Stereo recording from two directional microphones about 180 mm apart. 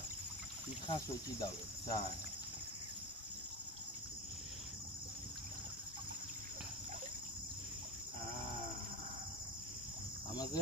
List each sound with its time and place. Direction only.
0.8 s cricket: 20° left (ahead or behind)
10.3 s cricket: 20° left (ahead or behind)